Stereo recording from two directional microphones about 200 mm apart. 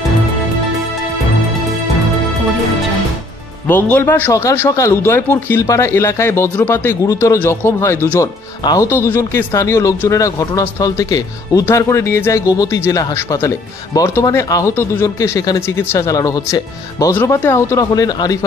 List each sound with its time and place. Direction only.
3.6 s speech: 10° left (ahead or behind)